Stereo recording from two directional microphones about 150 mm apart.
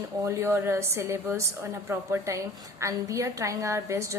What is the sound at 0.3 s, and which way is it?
A woman's voice, 15° right (ahead or behind).